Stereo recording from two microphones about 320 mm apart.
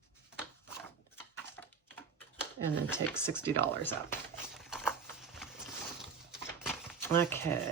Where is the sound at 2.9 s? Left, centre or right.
Centre.